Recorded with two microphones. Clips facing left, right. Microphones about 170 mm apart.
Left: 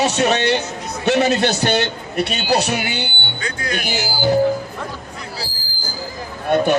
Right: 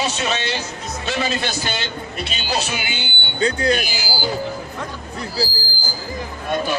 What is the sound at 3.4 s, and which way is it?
Speech, 30° right (ahead or behind).